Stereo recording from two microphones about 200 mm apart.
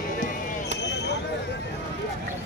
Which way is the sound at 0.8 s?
55° left (ahead or behind).